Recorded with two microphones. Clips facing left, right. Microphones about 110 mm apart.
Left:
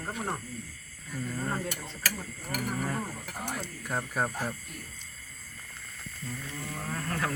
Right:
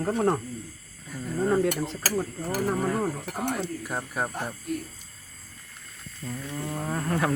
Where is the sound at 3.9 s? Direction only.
5° right (ahead or behind).